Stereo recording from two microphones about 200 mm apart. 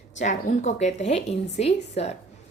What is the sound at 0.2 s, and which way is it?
A woman's voice, 40° left (ahead or behind).